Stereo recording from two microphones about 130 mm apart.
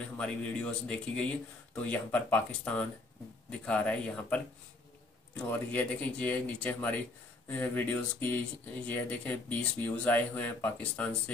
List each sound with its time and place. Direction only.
0.2 s speech: 10° left (ahead or behind)